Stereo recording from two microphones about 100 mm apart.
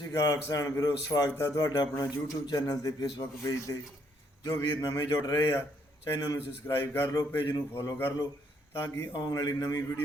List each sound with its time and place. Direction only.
0.0 s speech: 35° left (ahead or behind)
6.3 s a man's voice: 25° left (ahead or behind)
8.8 s speech: 35° left (ahead or behind)